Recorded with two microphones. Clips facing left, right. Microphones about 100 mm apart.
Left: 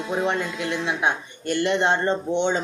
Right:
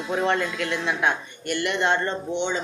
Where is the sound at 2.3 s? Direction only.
50° left (ahead or behind).